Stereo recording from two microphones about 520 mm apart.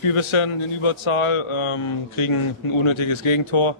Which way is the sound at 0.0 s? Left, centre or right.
Left.